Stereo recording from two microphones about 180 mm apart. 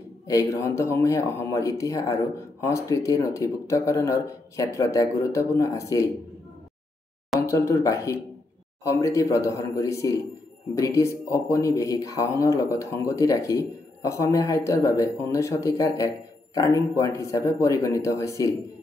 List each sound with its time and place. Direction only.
0.3 s speech: 15° left (ahead or behind)
7.4 s speech: 15° left (ahead or behind)